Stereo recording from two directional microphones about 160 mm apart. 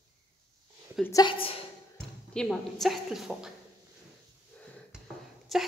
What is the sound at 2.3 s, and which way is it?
A woman's voice, centre (ahead or behind).